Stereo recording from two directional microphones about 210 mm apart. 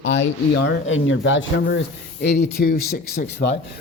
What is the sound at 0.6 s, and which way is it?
Speech, 65° left (ahead or behind).